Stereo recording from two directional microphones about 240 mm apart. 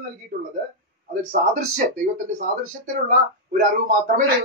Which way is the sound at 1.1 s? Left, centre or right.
Right.